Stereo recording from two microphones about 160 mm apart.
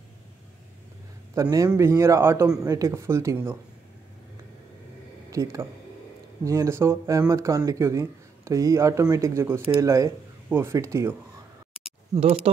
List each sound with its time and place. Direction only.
1.3 s speech: 20° right (ahead or behind)
5.3 s speech: 20° right (ahead or behind)